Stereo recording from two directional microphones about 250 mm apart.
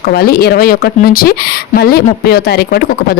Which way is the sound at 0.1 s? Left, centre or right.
Left.